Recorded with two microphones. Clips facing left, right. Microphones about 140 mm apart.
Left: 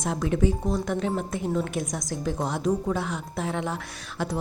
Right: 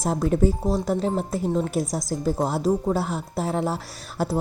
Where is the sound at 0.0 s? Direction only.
40° right (ahead or behind).